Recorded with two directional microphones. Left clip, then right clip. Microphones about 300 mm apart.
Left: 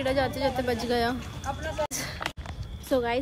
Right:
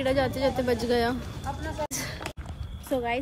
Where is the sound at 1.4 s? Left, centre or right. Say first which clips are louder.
Left 3 dB; left.